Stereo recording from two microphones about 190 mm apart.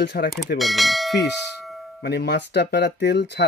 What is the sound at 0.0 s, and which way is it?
Speech, 65° left (ahead or behind).